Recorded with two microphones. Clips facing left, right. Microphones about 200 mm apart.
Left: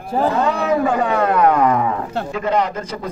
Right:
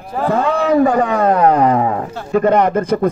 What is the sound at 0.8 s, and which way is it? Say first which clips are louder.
Speech: right 4 dB; 40° right (ahead or behind).